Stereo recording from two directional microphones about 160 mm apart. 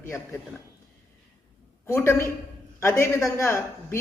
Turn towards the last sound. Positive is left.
turn(degrees=15)  # may be behind; listen again after turning